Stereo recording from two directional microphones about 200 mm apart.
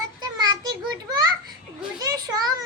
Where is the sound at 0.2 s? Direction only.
20° right (ahead or behind).